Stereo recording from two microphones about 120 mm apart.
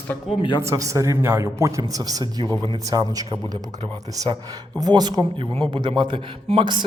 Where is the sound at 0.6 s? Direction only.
25° right (ahead or behind).